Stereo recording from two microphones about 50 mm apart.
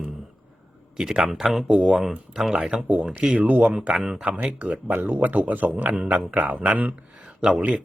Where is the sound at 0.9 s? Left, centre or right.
Centre.